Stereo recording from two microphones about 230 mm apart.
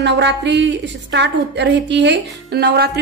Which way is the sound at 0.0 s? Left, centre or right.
Right.